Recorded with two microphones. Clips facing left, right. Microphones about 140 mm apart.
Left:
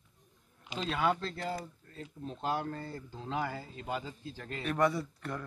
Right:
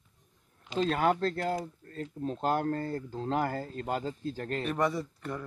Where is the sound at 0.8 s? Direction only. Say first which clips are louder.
Right 5 dB; 45° right (ahead or behind).